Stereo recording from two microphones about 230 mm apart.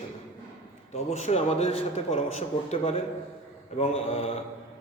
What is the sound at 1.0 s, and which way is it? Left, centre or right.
A man's voice, left.